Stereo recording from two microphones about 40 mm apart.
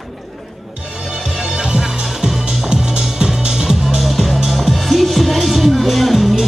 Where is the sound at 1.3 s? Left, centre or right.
Centre.